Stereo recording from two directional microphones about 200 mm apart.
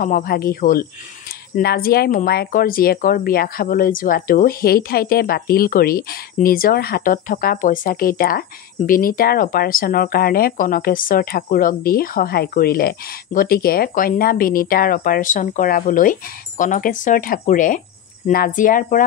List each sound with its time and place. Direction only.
0.0 s a woman's voice: 45° left (ahead or behind)